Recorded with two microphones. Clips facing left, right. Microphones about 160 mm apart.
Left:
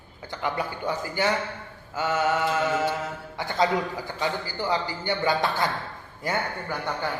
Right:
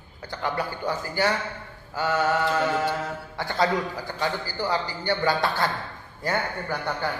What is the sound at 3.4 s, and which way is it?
A man's voice, 20° left (ahead or behind).